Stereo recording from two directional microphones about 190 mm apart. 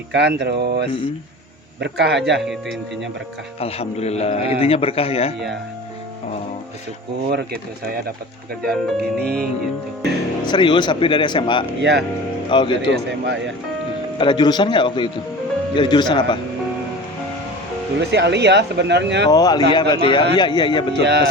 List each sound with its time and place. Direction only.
0.1 s speech: 65° right (ahead or behind)
2.4 s speech: centre (ahead or behind)
3.6 s a man's voice: 30° left (ahead or behind)
7.3 s speech: 55° right (ahead or behind)
8.6 s speech: 5° left (ahead or behind)
9.2 s speech: 55° right (ahead or behind)
10.4 s speech: 25° left (ahead or behind)
11.8 s speech: 60° right (ahead or behind)
12.5 s speech: 25° left (ahead or behind)
12.9 s a man's voice: 70° right (ahead or behind)
14.2 s speech: 25° left (ahead or behind)
18.1 s speech: 65° right (ahead or behind)
19.3 s speech: 20° left (ahead or behind)
21.0 s speech: 60° right (ahead or behind)